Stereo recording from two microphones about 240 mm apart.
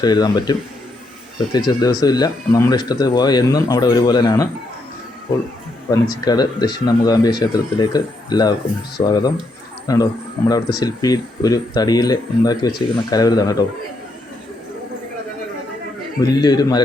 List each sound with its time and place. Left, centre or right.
0.0 s speech: centre
1.5 s speech: centre
5.9 s a man's voice: centre
16.2 s speech: centre